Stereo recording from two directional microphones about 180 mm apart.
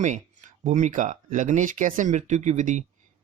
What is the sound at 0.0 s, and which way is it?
Speech, 40° right (ahead or behind).